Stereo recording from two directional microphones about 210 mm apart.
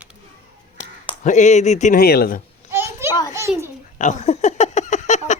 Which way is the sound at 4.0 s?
35° left (ahead or behind).